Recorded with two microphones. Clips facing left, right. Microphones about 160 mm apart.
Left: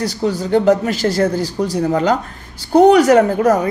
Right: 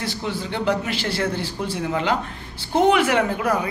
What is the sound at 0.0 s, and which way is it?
A woman's voice, 40° left (ahead or behind).